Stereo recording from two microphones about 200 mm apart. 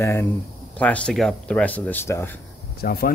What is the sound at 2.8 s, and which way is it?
Speech, 50° left (ahead or behind).